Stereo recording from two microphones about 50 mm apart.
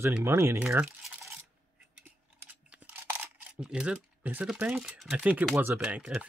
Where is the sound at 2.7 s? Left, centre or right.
Right.